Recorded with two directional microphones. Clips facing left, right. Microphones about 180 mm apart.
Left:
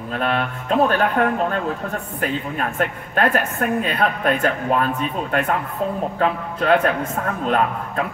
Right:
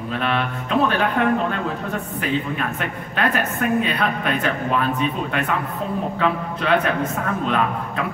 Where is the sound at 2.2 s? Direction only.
45° left (ahead or behind).